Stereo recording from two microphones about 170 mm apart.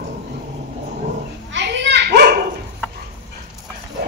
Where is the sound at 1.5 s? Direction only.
90° right.